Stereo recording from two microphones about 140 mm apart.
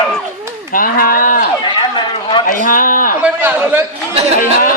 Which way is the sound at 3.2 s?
10° right (ahead or behind).